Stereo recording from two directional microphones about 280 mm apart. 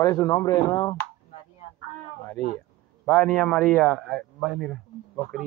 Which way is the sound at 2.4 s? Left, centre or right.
Right.